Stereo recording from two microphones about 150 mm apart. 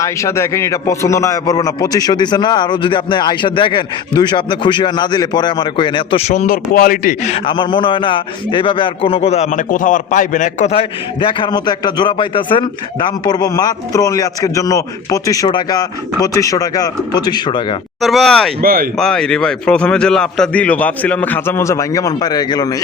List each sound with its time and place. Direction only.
0.0 s a man's voice: 20° left (ahead or behind); by 7.3 s 65° left (ahead or behind)
7.3 s a man's voice: 35° left (ahead or behind)
18.0 s speech: centre (ahead or behind)
18.6 s speech: 70° right (ahead or behind)
18.9 s a man's voice: 5° left (ahead or behind); by 22.8 s 25° left (ahead or behind)